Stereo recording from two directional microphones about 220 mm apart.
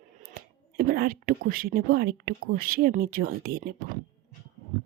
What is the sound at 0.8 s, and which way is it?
A woman's voice, 40° right (ahead or behind).